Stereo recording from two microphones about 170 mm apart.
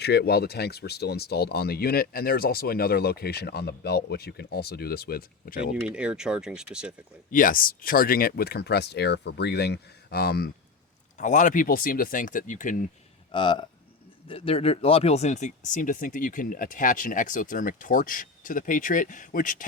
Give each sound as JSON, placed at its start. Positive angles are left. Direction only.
{"t": 0.0, "sound": "speech", "side_deg": 75}
{"t": 5.9, "sound": "speech", "side_deg": -5}
{"t": 7.3, "sound": "speech", "side_deg": 50}
{"t": 11.2, "sound": "speech", "side_deg": 45}
{"t": 13.3, "sound": "speech", "side_deg": 30}